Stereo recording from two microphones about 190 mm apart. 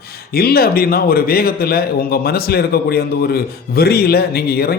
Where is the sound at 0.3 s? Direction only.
55° left (ahead or behind).